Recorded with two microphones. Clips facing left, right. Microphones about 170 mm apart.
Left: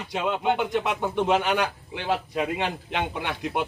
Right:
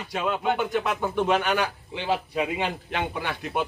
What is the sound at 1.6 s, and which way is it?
Speech, 10° left (ahead or behind).